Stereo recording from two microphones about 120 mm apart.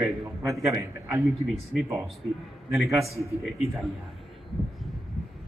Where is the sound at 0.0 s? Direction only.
25° right (ahead or behind).